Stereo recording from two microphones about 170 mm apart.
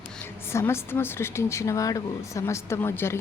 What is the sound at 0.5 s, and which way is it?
A woman's voice, 15° left (ahead or behind).